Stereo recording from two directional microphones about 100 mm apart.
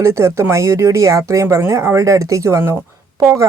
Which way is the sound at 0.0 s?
30° right (ahead or behind).